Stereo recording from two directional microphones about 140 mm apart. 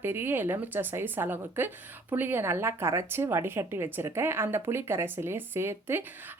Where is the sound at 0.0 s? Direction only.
15° right (ahead or behind).